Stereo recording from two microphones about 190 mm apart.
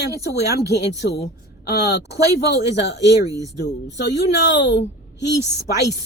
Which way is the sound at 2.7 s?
65° left (ahead or behind).